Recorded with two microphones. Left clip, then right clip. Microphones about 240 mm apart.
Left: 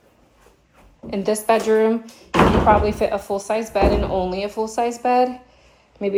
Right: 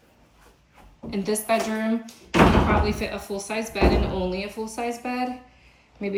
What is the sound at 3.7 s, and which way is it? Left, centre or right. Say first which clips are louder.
Speech: left 4 dB; centre.